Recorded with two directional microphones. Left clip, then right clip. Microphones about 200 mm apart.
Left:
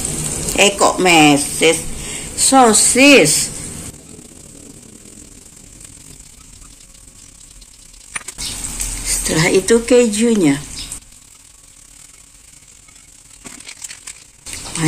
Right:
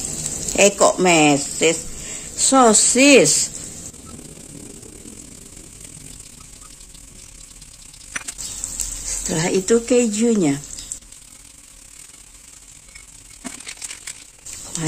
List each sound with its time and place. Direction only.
0.5 s speech: 55° right (ahead or behind)
9.3 s speech: 50° right (ahead or behind)
14.8 s pig: 45° right (ahead or behind)